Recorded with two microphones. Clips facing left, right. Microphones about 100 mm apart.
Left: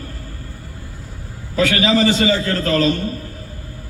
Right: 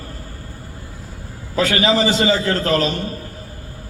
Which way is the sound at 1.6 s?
20° right (ahead or behind).